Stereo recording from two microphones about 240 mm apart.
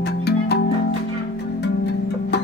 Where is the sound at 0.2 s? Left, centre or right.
Left.